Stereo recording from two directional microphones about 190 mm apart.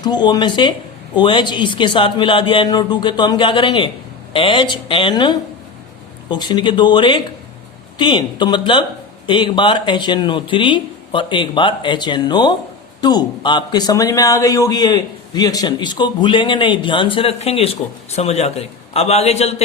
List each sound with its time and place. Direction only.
0.0 s speech: 20° left (ahead or behind)